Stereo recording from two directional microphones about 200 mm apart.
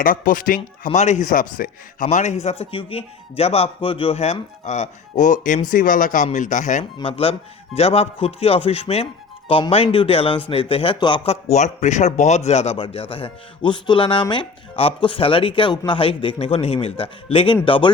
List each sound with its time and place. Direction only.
0.0 s a man's voice: 45° left (ahead or behind); by 17.9 s 25° left (ahead or behind)